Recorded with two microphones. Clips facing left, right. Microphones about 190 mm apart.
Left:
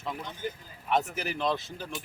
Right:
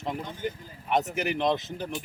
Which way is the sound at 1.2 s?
20° right (ahead or behind).